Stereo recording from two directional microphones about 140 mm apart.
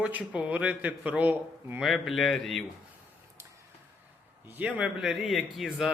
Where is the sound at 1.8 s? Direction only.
Centre (ahead or behind).